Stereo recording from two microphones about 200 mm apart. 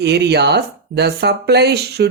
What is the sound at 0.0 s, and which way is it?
Speech, 55° right (ahead or behind).